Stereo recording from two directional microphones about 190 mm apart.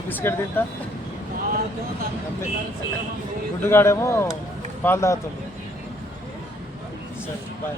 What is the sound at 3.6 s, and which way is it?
Speech, 15° left (ahead or behind).